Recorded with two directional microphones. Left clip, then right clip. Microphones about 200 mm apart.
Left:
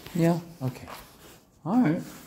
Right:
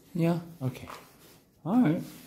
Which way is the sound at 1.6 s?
15° right (ahead or behind).